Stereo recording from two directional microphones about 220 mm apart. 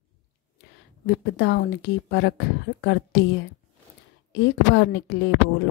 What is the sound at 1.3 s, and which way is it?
A woman's voice, 50° left (ahead or behind).